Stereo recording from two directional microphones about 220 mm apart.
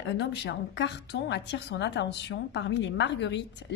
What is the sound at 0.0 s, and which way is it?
A woman's voice, 50° left (ahead or behind).